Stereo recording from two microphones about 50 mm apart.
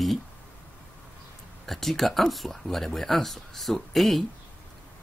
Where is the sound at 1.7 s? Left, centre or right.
Centre.